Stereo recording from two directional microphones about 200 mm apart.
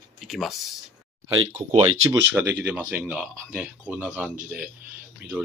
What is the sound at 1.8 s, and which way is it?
Speech, 90° right.